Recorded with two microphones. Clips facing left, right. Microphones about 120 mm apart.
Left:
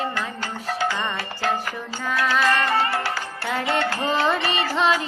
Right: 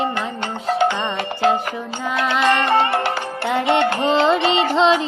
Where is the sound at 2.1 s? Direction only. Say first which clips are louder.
Right 3 dB; 25° right (ahead or behind).